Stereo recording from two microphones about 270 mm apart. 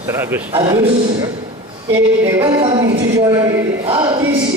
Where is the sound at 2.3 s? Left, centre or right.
Centre.